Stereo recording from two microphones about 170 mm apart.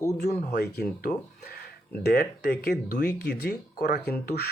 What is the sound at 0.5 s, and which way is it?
Speech, 60° left (ahead or behind).